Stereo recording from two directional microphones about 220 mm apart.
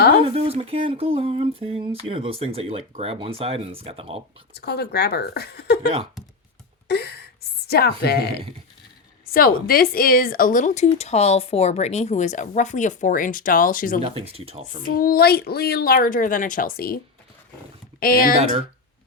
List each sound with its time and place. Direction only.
0.2 s speech: 25° right (ahead or behind)
4.5 s a woman's voice: 45° left (ahead or behind)
6.8 s a sound: 50° left (ahead or behind)
7.7 s a woman's voice: 45° left (ahead or behind)
14.0 s speech: 25° right (ahead or behind)
14.8 s speech: 40° left (ahead or behind)
18.0 s speech: 40° left (ahead or behind)